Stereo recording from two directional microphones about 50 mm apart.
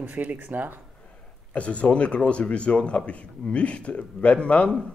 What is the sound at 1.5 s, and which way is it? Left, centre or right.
Speech, left.